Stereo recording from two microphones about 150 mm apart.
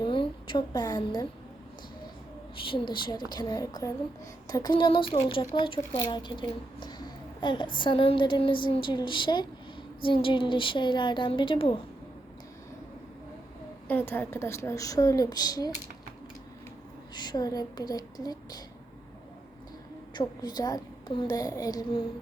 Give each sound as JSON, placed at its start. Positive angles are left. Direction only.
{"t": 0.0, "sound": "a woman's voice", "side_deg": 35}
{"t": 2.6, "sound": "a woman's voice", "side_deg": 30}
{"t": 13.8, "sound": "a woman's voice", "side_deg": 15}
{"t": 17.2, "sound": "a woman's voice", "side_deg": 25}
{"t": 20.1, "sound": "a woman's voice", "side_deg": 25}